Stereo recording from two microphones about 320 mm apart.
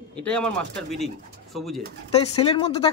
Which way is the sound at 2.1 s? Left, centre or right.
Centre.